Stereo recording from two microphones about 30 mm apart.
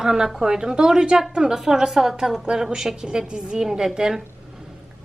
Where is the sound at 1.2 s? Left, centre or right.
Centre.